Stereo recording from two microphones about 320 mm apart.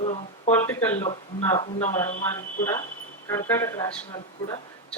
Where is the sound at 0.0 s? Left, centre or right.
Centre.